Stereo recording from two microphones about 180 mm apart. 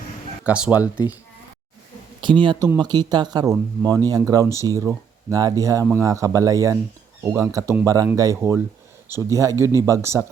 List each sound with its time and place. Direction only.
0.4 s speech: 5° right (ahead or behind)
2.2 s speech: 25° right (ahead or behind)